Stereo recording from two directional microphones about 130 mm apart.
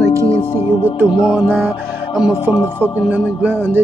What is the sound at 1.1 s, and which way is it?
Music, 35° left (ahead or behind).